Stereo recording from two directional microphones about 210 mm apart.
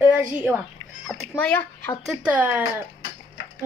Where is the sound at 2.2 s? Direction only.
5° right (ahead or behind).